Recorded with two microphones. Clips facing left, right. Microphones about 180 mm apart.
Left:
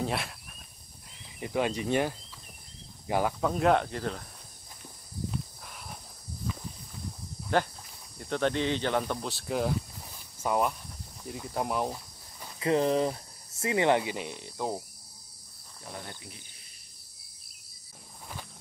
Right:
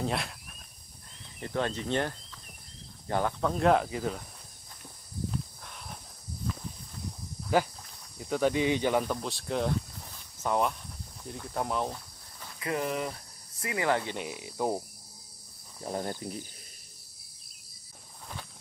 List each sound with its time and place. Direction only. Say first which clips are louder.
0.0 s speech: even; centre (ahead or behind)
1.4 s speech: left 2 dB; 10° left (ahead or behind); by 4.2 s 5° right (ahead or behind)
5.3 s a sound: even; 5° left (ahead or behind)
7.5 s speech: right 1 dB; 5° right (ahead or behind); by 12.4 s 10° left (ahead or behind)
12.5 s speech: left 6 dB; 30° left (ahead or behind)
14.0 s speech: even; centre (ahead or behind)
15.8 s speech: right 9 dB; 40° right (ahead or behind)